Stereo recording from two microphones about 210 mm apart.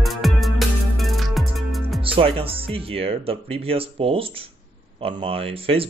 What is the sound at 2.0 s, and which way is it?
Speech, 25° right (ahead or behind).